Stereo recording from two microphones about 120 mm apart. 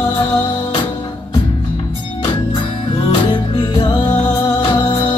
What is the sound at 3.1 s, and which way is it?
Music, 40° left (ahead or behind).